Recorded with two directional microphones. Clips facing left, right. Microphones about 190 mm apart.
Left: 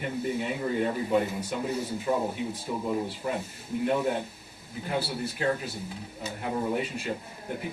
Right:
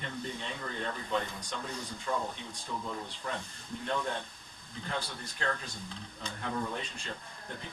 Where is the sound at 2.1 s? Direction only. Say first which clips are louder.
Left 6 dB; 25° left (ahead or behind).